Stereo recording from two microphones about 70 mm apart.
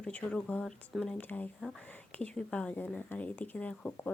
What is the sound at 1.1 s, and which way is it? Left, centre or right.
Speech, left.